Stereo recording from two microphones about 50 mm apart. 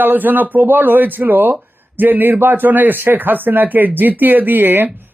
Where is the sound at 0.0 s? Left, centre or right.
Right.